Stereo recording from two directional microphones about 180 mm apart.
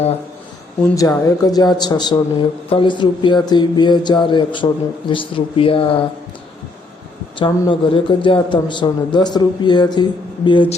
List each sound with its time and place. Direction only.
0.9 s a man's voice: 20° left (ahead or behind)
7.6 s a man's voice: 30° left (ahead or behind)